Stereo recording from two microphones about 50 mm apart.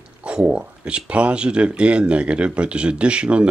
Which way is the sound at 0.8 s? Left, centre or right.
Right.